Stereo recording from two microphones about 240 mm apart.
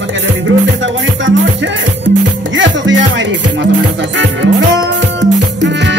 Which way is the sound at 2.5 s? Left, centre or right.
Right.